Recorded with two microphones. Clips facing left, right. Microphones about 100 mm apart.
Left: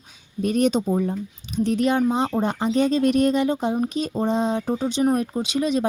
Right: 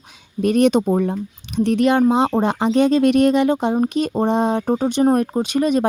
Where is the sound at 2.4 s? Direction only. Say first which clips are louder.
Right 4 dB; 90° right.